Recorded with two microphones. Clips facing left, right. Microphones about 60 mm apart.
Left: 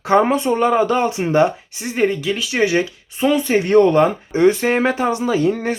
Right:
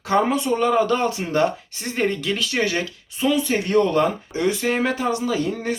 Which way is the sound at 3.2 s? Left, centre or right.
Left.